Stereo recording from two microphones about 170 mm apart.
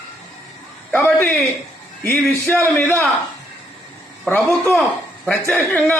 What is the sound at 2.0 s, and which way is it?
A man's voice, 15° left (ahead or behind).